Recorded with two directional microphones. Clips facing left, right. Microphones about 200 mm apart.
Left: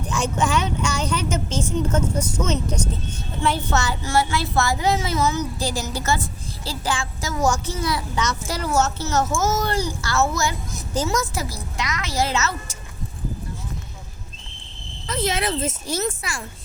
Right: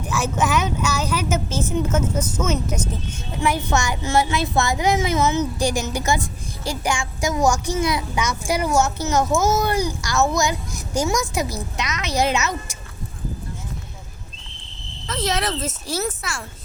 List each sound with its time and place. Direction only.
0.2 s a child's voice: 5° right (ahead or behind)
16.0 s a child's voice: centre (ahead or behind)